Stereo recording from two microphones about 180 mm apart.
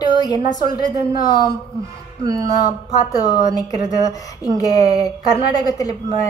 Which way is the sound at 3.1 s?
20° left (ahead or behind).